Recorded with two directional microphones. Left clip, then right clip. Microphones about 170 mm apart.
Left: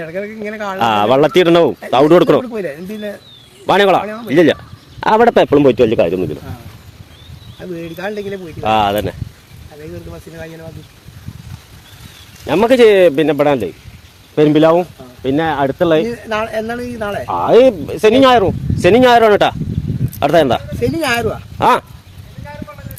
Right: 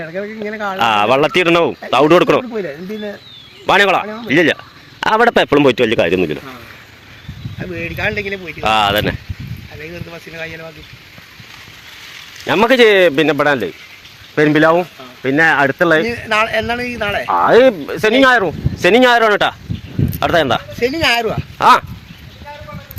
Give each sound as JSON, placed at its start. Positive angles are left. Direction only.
{"t": 0.0, "sound": "speech", "side_deg": 30}
{"t": 0.8, "sound": "speech", "side_deg": 15}
{"t": 3.7, "sound": "speech", "side_deg": 10}
{"t": 4.9, "sound": "a man's voice", "side_deg": 5}
{"t": 7.6, "sound": "speech", "side_deg": 50}
{"t": 8.6, "sound": "speech", "side_deg": 5}
{"t": 10.1, "sound": "speech", "side_deg": 35}
{"t": 12.5, "sound": "speech", "side_deg": 5}
{"t": 16.0, "sound": "speech", "side_deg": 40}
{"t": 17.4, "sound": "speech", "side_deg": 15}
{"t": 20.8, "sound": "speech", "side_deg": 70}
{"t": 21.6, "sound": "speech", "side_deg": 10}